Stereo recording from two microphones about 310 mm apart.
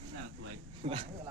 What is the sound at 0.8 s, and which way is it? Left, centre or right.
Speech, right.